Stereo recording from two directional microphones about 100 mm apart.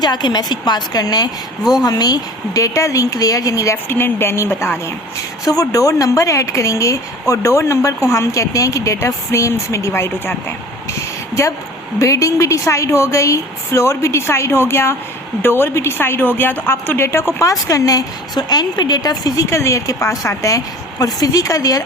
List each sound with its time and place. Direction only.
0.0 s a woman's voice: 45° left (ahead or behind); by 4.8 s 25° left (ahead or behind)
5.5 s a woman's voice: 35° left (ahead or behind)
11.9 s a woman's voice: 30° left (ahead or behind)